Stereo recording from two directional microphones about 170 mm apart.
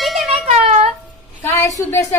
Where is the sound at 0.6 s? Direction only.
35° right (ahead or behind).